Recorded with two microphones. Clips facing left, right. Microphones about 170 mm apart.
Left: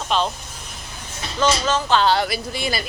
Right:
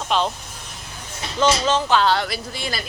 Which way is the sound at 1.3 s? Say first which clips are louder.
Right 1 dB; 25° right (ahead or behind).